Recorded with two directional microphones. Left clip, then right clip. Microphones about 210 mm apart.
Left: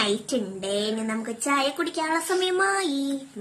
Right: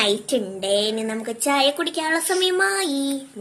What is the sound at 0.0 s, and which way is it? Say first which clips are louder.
A woman's voice: right 5 dB; 10° left (ahead or behind).